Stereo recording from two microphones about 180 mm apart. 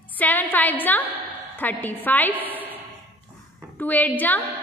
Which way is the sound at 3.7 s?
10° left (ahead or behind).